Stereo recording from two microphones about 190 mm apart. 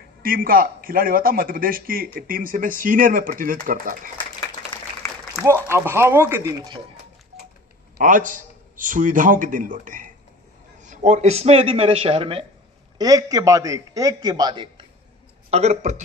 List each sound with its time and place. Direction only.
0.2 s a man's voice: 50° right (ahead or behind)
5.4 s speech: 15° right (ahead or behind)
8.0 s a man's voice: 45° right (ahead or behind)
12.9 s a man's voice: 20° right (ahead or behind)
15.5 s a man's voice: 35° right (ahead or behind)